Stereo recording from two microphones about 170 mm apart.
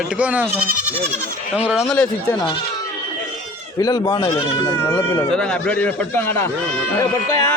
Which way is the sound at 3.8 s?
20° left (ahead or behind).